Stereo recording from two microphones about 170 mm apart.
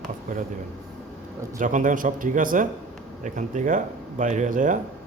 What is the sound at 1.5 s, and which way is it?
Speech, 50° right (ahead or behind).